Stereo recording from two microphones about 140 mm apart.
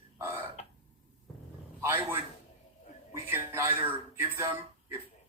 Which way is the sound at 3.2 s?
15° right (ahead or behind).